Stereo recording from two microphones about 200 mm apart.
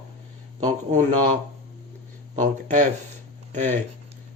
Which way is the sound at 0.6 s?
40° right (ahead or behind).